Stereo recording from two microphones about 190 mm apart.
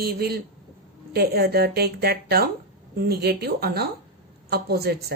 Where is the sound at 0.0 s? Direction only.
55° right (ahead or behind).